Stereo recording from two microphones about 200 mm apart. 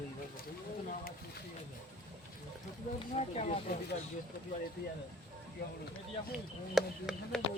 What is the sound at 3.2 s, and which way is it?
Speech, 35° left (ahead or behind).